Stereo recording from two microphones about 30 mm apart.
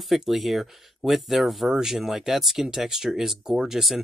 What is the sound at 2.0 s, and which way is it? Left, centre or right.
Speech, centre.